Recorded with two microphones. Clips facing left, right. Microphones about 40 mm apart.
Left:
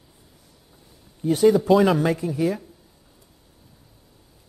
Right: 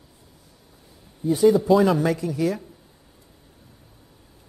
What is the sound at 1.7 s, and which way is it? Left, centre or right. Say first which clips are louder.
Speech: left 1 dB; centre.